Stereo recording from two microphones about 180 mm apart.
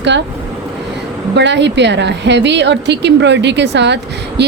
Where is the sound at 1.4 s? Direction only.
75° right (ahead or behind).